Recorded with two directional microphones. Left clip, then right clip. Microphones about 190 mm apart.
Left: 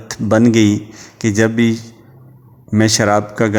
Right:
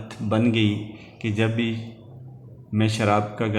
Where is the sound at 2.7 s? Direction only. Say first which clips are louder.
Left 9 dB; 45° left (ahead or behind).